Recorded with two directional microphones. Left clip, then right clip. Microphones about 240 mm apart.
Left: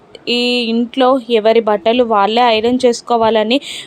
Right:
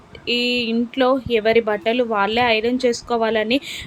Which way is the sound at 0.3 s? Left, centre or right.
Centre.